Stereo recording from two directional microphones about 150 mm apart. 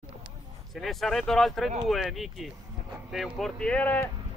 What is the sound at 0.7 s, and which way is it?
Speech, centre (ahead or behind).